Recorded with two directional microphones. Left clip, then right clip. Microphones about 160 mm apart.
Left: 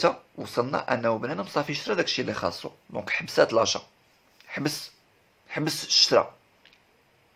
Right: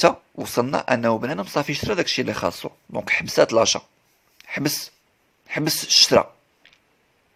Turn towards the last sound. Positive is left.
turn(degrees=-50)  # may be behind; listen again after turning